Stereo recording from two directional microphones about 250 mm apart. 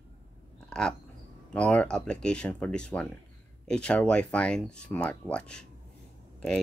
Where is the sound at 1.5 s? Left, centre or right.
Centre.